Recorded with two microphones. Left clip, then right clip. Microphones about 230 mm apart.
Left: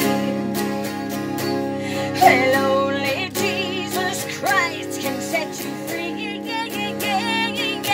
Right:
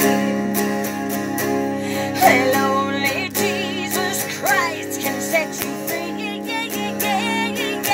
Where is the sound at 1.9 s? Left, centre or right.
Centre.